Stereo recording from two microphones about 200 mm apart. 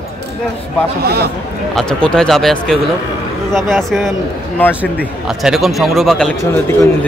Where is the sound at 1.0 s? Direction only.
50° right (ahead or behind).